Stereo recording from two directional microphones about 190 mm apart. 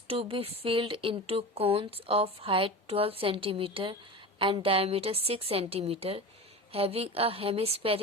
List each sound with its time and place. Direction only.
0.1 s a woman's voice: 30° right (ahead or behind)